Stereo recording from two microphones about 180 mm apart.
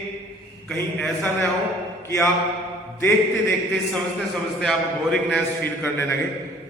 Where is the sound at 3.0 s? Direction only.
10° left (ahead or behind).